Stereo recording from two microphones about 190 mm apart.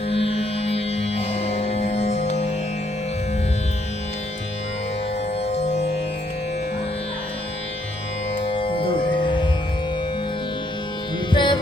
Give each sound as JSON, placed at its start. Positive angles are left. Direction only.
{"t": 0.1, "sound": "music", "side_deg": 30}
{"t": 5.5, "sound": "music", "side_deg": 35}
{"t": 8.4, "sound": "music", "side_deg": 30}
{"t": 11.3, "sound": "music", "side_deg": 25}